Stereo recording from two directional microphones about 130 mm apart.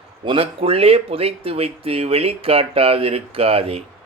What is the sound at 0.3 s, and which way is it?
Speech, 45° right (ahead or behind).